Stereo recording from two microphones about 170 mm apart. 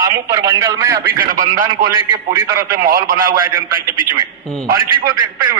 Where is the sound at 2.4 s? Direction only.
15° right (ahead or behind).